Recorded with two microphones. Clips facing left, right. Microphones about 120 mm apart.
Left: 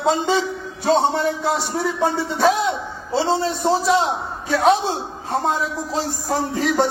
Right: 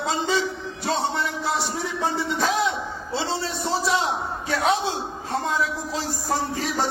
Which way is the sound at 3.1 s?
35° left (ahead or behind).